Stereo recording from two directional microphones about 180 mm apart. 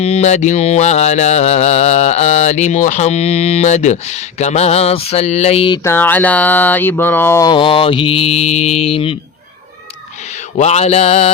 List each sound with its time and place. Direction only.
0.0 s music: 35° left (ahead or behind)
5.8 s a sound: 10° left (ahead or behind); by 9.1 s 30° left (ahead or behind)
10.6 s music: 35° left (ahead or behind)